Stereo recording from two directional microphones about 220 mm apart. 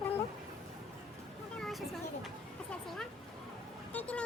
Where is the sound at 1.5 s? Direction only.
Centre (ahead or behind).